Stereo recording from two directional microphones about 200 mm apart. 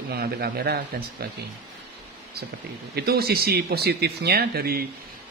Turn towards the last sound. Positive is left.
turn(degrees=-50)  # may be behind; listen again after turning